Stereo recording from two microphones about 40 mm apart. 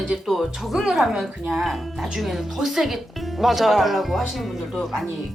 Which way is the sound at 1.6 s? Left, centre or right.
Centre.